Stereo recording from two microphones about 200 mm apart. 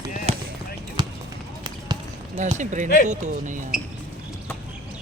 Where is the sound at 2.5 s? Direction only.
40° right (ahead or behind).